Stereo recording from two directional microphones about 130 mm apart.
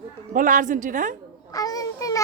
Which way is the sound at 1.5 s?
30° left (ahead or behind).